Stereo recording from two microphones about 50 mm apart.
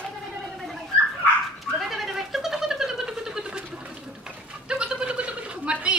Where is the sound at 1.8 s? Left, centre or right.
Centre.